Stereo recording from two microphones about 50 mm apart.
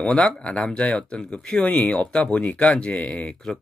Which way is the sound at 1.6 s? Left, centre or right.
Left.